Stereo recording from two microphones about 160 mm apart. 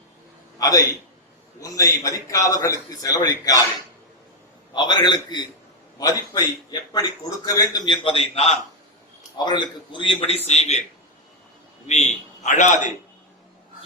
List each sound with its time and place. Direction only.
0.6 s a man's voice: 25° left (ahead or behind)
4.7 s a man's voice: 25° left (ahead or behind)
9.4 s a man's voice: 30° left (ahead or behind)
11.9 s a man's voice: 45° left (ahead or behind)